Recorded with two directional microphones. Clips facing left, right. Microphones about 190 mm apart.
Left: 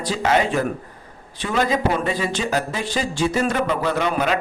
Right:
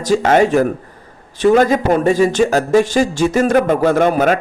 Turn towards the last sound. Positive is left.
turn(degrees=-50)  # may be behind; listen again after turning